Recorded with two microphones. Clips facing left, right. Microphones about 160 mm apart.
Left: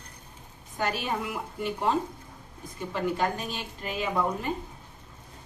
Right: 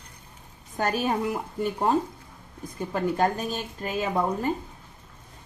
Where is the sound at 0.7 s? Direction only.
45° right (ahead or behind).